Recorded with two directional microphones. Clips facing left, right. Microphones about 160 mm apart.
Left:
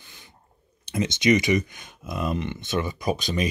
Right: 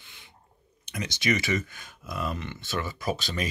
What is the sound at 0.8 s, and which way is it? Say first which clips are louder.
Speech: left 7 dB; 25° left (ahead or behind).